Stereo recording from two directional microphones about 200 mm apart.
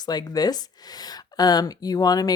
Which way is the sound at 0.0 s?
20° left (ahead or behind).